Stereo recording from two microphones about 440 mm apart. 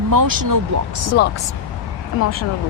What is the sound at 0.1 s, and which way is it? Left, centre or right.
Speech, right.